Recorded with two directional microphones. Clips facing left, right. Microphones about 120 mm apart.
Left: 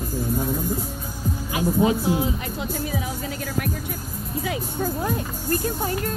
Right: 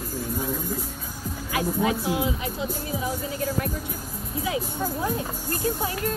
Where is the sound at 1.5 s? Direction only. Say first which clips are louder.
Left 4 dB; 25° left (ahead or behind).